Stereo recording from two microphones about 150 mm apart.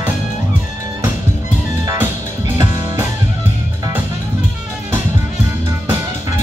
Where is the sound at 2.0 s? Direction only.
15° right (ahead or behind).